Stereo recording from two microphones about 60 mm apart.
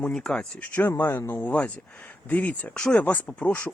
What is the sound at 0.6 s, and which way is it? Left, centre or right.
Speech, left.